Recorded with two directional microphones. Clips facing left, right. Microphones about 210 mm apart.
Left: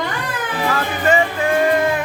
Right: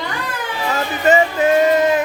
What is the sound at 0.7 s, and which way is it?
Music, 20° right (ahead or behind).